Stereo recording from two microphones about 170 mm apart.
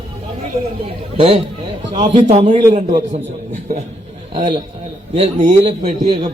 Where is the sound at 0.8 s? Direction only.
30° right (ahead or behind).